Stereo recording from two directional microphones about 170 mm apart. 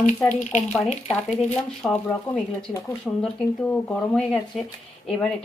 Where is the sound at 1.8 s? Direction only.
5° left (ahead or behind).